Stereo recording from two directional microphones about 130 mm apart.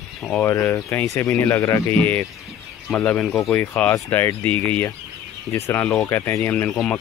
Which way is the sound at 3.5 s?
15° left (ahead or behind).